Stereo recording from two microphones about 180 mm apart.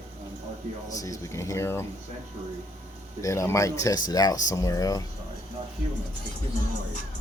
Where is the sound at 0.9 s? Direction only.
20° left (ahead or behind).